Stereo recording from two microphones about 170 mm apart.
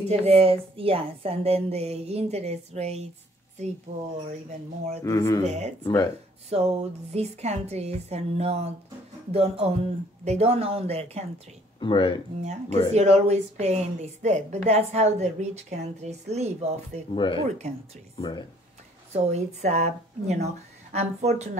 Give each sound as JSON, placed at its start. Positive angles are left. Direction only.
{"t": 0.0, "sound": "a woman's voice", "side_deg": -35}
{"t": 5.0, "sound": "speech", "side_deg": 20}
{"t": 5.5, "sound": "a woman's voice", "side_deg": -40}
{"t": 11.8, "sound": "speech", "side_deg": 30}
{"t": 12.4, "sound": "a woman's voice", "side_deg": -45}
{"t": 17.1, "sound": "speech", "side_deg": 30}
{"t": 19.1, "sound": "a woman's voice", "side_deg": -40}